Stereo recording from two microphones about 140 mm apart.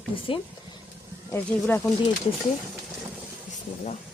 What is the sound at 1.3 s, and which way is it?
Speech, 15° left (ahead or behind).